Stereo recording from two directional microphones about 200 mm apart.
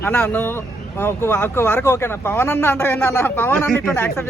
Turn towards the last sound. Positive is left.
turn(degrees=10)  # may be behind; listen again after turning